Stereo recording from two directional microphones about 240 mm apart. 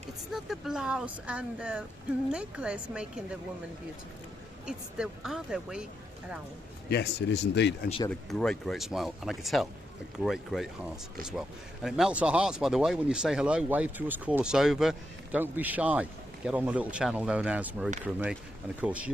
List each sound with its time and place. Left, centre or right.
0.3 s speech: centre
4.6 s speech: centre
6.9 s speech: left
8.0 s speech: centre